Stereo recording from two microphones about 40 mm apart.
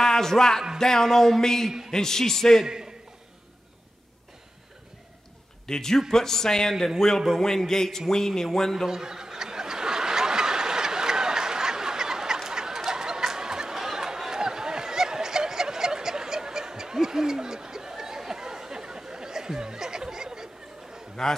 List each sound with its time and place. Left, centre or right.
0.0 s speech: centre
2.6 s a man's voice: centre
5.7 s speech: centre
8.8 s snicker: centre
12.4 s a sound: centre
21.2 s a man's voice: centre